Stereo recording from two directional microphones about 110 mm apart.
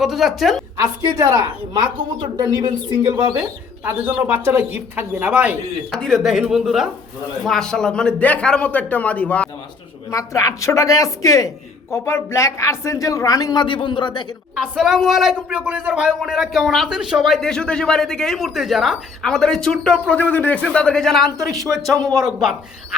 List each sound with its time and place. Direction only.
0.0 s speech: centre (ahead or behind)
0.8 s a woman's voice: 35° right (ahead or behind)
3.8 s speech: 20° right (ahead or behind)
5.9 s speech: 5° left (ahead or behind)
10.1 s a man's voice: 30° left (ahead or behind)
14.5 s speech: 5° right (ahead or behind)